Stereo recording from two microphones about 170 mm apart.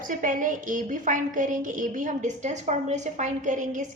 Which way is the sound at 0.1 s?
50° right (ahead or behind).